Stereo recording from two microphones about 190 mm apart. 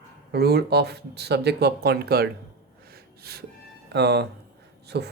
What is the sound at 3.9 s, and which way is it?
Speech, 60° right (ahead or behind).